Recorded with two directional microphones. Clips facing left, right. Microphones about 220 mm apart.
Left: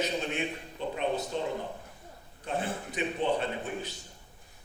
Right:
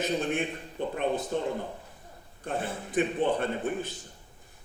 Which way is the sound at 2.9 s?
50° right (ahead or behind).